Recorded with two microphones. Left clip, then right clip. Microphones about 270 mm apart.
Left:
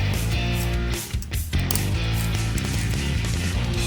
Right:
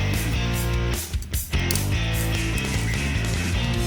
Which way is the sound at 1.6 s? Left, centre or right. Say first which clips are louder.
Right 2 dB; centre.